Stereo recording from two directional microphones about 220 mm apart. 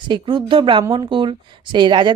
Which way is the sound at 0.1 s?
20° right (ahead or behind).